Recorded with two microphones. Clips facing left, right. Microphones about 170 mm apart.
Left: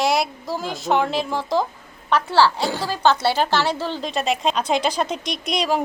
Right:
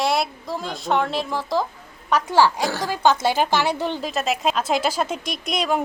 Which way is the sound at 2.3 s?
15° right (ahead or behind).